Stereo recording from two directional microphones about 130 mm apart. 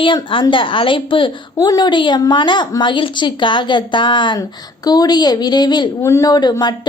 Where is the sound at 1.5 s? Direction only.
30° left (ahead or behind).